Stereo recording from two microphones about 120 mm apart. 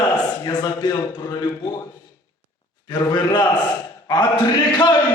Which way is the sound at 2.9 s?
40° left (ahead or behind).